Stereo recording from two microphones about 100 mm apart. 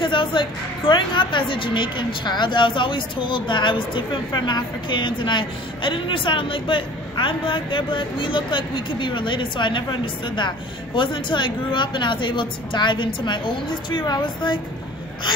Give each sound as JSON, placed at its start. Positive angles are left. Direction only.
{"t": 0.0, "sound": "a woman's voice", "side_deg": 55}